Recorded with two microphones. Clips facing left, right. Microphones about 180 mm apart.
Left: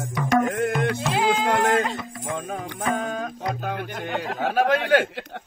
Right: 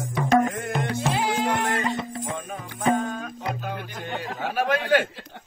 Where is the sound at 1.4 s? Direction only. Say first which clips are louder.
Left 4 dB; 70° left (ahead or behind).